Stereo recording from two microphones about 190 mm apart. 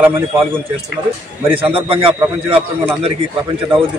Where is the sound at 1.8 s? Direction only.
30° right (ahead or behind).